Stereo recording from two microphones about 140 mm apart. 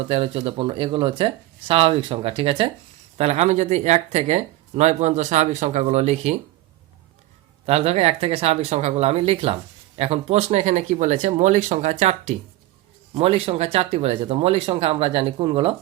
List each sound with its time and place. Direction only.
0.1 s speech: 40° right (ahead or behind)
3.2 s speech: 50° right (ahead or behind)
7.7 s speech: 50° right (ahead or behind)